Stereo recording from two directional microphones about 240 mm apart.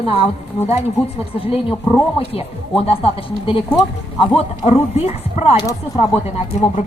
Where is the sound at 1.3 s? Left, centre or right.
Left.